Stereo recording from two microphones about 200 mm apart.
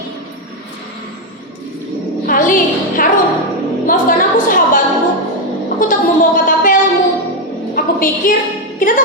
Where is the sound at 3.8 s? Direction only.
45° left (ahead or behind).